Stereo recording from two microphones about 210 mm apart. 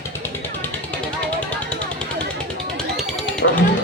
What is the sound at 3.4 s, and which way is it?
Music, 55° left (ahead or behind).